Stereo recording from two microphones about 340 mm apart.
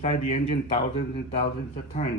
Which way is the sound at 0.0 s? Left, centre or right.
Centre.